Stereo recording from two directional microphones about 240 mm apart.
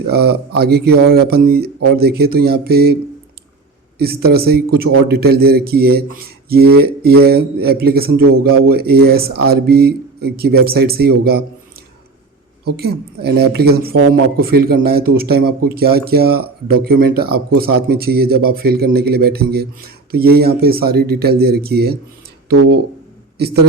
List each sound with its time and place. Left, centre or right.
0.1 s a woman's voice: right
12.6 s a woman's voice: right